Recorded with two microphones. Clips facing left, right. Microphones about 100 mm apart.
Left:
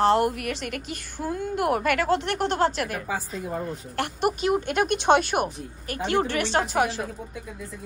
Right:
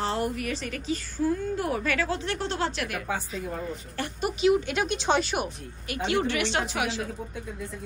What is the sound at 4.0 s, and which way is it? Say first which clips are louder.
Speech: left 6 dB; 65° left (ahead or behind).